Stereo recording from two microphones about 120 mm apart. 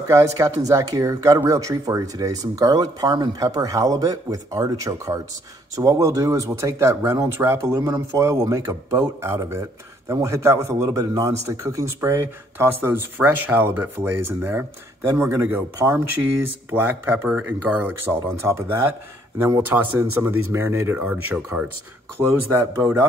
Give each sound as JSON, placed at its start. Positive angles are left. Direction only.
{"t": 0.1, "sound": "speech", "side_deg": -25}